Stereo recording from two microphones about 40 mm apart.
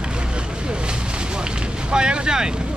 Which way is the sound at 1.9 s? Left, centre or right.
Right.